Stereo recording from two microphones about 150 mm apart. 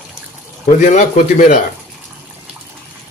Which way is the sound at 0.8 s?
55° left (ahead or behind).